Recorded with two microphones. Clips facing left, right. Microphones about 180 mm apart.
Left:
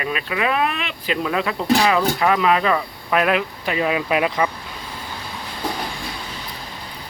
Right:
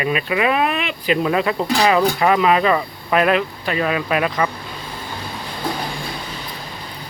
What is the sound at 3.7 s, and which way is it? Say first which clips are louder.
Speech: left 1 dB; 15° left (ahead or behind).